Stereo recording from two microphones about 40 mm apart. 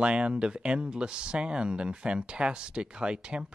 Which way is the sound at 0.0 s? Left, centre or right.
Right.